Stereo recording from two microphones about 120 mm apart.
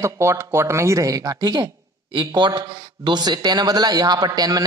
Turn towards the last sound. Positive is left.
turn(degrees=-35)  # may be behind; listen again after turning